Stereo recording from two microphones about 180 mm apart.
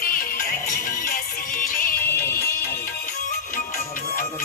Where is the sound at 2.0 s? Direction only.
15° left (ahead or behind).